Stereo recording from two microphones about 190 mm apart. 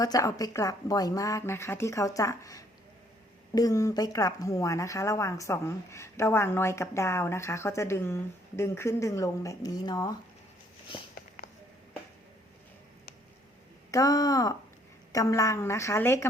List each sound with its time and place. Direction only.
0.0 s a woman's voice: 20° left (ahead or behind)
13.9 s a woman's voice: 20° left (ahead or behind)